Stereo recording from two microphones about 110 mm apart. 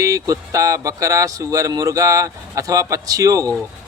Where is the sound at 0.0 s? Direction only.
30° right (ahead or behind).